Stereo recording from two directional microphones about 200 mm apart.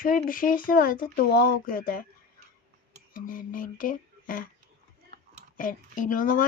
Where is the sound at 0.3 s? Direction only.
45° left (ahead or behind).